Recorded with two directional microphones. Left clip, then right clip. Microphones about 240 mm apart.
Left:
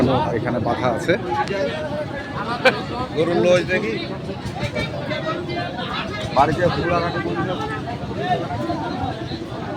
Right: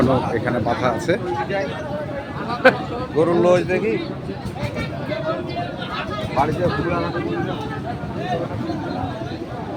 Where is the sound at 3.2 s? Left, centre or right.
Right.